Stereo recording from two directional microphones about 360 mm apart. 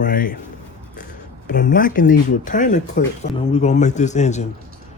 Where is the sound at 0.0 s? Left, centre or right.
Left.